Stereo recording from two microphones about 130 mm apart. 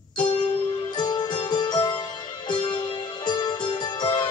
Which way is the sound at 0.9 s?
35° left (ahead or behind).